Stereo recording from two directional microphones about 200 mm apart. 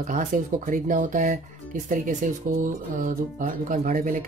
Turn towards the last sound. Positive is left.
turn(degrees=-40)  # may be behind; listen again after turning